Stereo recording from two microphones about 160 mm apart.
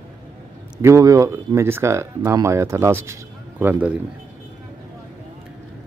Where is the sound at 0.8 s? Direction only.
20° right (ahead or behind).